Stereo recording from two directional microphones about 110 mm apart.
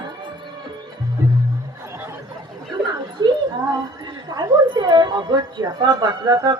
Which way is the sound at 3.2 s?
40° right (ahead or behind).